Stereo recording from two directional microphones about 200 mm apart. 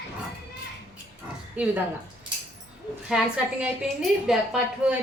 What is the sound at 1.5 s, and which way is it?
Speech, 5° right (ahead or behind).